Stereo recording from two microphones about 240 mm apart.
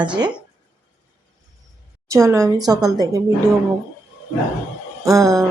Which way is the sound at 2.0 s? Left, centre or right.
Centre.